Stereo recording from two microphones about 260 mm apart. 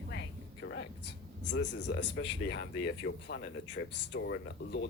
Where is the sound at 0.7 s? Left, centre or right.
Left.